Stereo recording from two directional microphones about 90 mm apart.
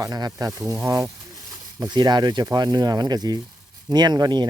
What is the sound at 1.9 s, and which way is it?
Speech, 55° right (ahead or behind).